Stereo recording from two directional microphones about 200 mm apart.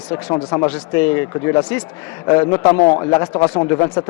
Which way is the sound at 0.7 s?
10° left (ahead or behind).